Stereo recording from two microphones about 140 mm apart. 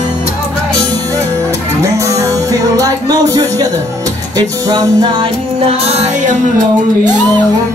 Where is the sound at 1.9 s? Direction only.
25° right (ahead or behind).